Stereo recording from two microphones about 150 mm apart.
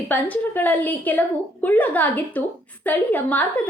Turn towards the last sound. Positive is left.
turn(degrees=10)  # may be behind; listen again after turning